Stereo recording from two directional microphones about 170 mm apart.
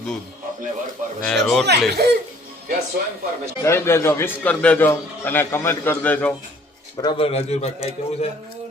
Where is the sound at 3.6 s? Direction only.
15° left (ahead or behind).